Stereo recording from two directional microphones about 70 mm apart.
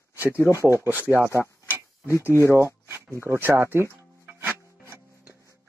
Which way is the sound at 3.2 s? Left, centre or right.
Right.